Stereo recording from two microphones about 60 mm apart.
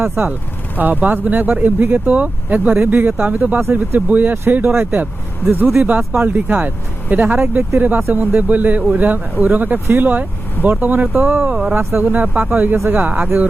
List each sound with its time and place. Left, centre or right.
0.0 s speech: right
5.5 s speech: right
6.1 s speech: right
11.8 s speech: right
12.0 s speech: right